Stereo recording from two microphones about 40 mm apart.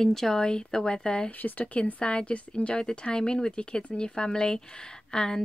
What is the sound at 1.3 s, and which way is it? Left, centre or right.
Speech, left.